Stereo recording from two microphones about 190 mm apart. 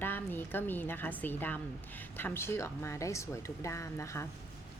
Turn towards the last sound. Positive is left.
turn(degrees=15)  # may be behind; listen again after turning